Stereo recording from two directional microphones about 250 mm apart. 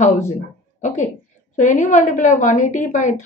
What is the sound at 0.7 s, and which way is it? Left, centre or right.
A woman's voice, left.